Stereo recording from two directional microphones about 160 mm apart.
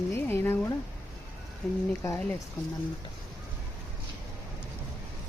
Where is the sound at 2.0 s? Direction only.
20° left (ahead or behind).